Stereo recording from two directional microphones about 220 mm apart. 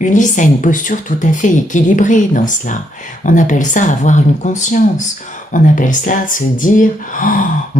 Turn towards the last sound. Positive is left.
turn(degrees=40)  # may be behind; listen again after turning